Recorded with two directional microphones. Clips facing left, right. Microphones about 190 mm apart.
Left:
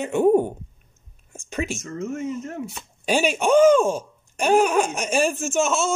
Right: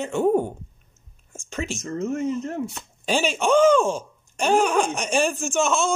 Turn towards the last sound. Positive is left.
turn(degrees=5)  # may be behind; listen again after turning